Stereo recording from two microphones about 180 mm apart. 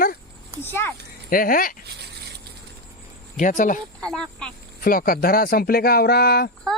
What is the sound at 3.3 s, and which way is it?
Speech, 45° left (ahead or behind).